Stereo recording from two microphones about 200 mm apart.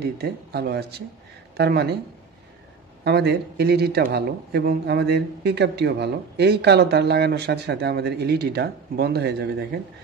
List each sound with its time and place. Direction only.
0.0 s speech: 55° right (ahead or behind)
3.0 s speech: 55° right (ahead or behind)